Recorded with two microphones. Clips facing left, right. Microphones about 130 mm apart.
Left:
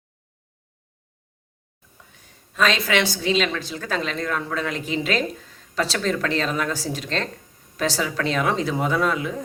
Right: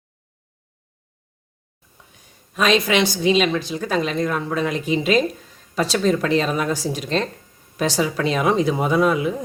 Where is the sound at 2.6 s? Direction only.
15° right (ahead or behind).